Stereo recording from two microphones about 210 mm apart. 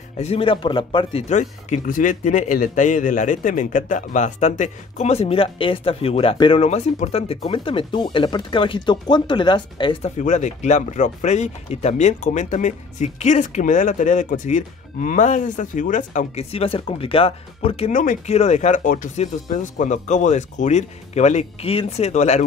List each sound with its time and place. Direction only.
0.2 s speech: 25° left (ahead or behind)